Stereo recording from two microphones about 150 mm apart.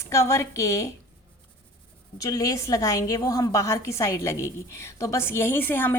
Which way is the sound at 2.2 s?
20° left (ahead or behind).